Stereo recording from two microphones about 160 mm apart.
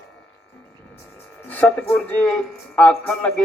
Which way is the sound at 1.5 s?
10° left (ahead or behind).